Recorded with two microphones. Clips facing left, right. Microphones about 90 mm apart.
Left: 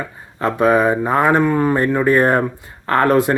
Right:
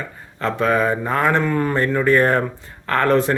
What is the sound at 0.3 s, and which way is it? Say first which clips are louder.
Speech: left 4 dB; 15° left (ahead or behind).